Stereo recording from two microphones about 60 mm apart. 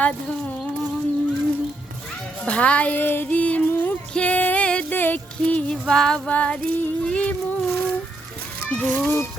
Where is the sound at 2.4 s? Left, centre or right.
Left.